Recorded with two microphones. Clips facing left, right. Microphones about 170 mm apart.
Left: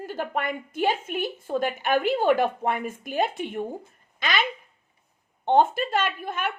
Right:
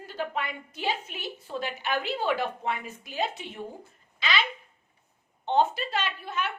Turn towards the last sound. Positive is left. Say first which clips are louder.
# left 4 dB
turn(degrees=50)  # may be behind; listen again after turning